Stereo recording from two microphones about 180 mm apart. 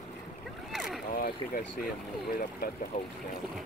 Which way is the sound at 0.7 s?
Centre (ahead or behind).